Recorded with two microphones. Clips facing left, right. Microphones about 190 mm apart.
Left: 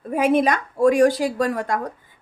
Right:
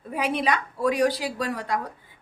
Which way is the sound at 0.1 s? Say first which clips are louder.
Left 7 dB; 45° left (ahead or behind).